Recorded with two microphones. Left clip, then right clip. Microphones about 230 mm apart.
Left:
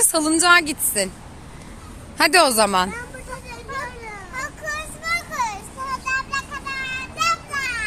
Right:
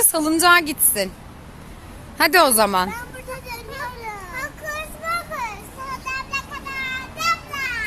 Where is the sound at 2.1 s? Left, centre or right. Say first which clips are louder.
Even; centre.